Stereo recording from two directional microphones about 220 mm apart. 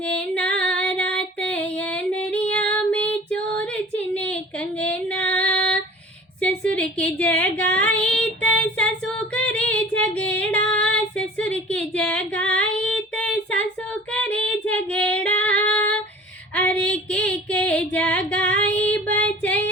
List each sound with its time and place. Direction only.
0.1 s female singing: 5° left (ahead or behind)
4.1 s a sound: 5° left (ahead or behind)
4.8 s female singing: 5° left (ahead or behind)